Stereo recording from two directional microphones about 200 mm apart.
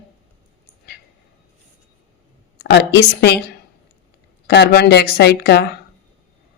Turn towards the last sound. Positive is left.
turn(degrees=50)  # may be behind; listen again after turning